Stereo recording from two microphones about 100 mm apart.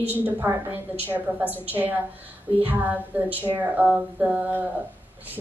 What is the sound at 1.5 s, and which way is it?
A woman's voice, 20° right (ahead or behind).